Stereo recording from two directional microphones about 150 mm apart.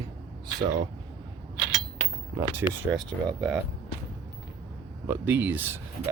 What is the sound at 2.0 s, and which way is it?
Cutlery, 55° left (ahead or behind).